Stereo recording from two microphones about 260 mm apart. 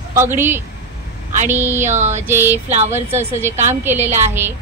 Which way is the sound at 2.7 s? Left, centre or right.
Right.